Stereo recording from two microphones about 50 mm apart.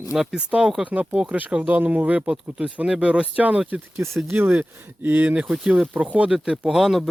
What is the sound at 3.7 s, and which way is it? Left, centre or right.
Speech, right.